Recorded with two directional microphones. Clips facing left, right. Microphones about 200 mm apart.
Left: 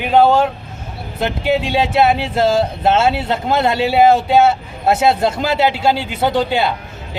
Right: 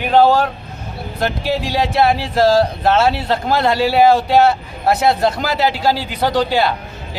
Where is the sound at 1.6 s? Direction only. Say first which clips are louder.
Right 1 dB; 25° left (ahead or behind).